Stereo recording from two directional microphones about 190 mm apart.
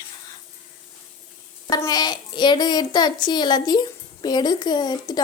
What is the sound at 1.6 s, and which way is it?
A woman's voice, 20° left (ahead or behind).